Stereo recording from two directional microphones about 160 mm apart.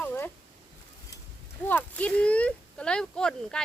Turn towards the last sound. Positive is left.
turn(degrees=5)  # may be behind; listen again after turning